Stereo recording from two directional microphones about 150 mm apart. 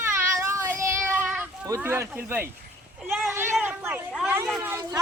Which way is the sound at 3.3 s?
15° right (ahead or behind).